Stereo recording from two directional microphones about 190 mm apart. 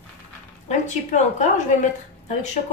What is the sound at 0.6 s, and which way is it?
A woman's voice, 40° left (ahead or behind).